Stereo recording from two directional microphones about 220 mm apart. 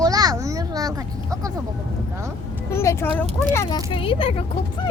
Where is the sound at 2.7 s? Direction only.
10° left (ahead or behind).